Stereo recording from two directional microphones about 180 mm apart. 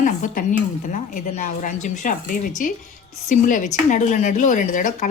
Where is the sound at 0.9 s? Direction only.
40° left (ahead or behind).